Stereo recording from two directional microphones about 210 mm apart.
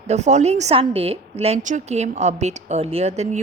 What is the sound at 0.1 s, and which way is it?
A woman's voice, 35° right (ahead or behind).